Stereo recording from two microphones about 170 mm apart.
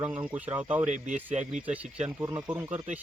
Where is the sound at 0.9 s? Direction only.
45° right (ahead or behind).